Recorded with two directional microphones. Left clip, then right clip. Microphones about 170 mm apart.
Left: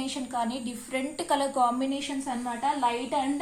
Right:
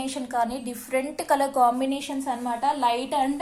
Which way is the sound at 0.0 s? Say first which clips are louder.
Right 4 dB; 40° right (ahead or behind).